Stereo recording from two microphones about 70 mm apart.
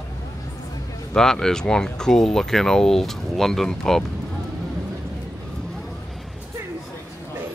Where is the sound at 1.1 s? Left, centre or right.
Centre.